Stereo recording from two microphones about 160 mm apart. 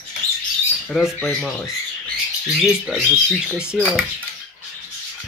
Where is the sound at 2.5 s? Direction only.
5° right (ahead or behind).